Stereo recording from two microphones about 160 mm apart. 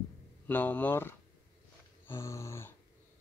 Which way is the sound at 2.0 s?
15° left (ahead or behind).